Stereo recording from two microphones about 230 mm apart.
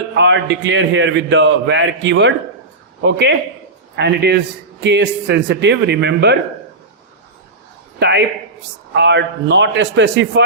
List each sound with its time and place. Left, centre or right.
0.2 s a man's voice: right
7.9 s a man's voice: right